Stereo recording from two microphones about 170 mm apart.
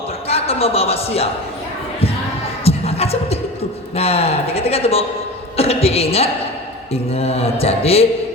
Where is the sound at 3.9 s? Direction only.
35° left (ahead or behind).